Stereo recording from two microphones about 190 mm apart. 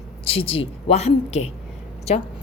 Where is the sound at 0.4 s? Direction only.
30° left (ahead or behind).